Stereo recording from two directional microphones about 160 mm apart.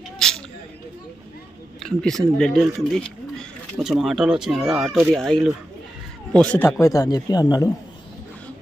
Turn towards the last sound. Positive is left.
turn(degrees=25)  # may be behind; listen again after turning